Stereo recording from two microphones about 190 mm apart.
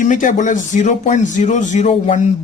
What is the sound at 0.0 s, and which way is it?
Speech, 45° left (ahead or behind).